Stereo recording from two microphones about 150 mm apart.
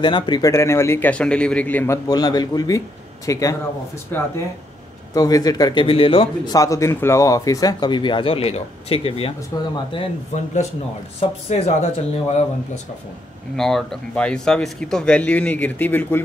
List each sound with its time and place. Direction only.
0.0 s speech: 30° left (ahead or behind); by 2.0 s 10° left (ahead or behind)
2.0 s speech: 25° left (ahead or behind)
6.5 s speech: 20° left (ahead or behind); by 9.3 s 40° left (ahead or behind)
9.5 s speech: 25° left (ahead or behind)
10.3 s speech: 50° left (ahead or behind)
13.6 s speech: centre (ahead or behind)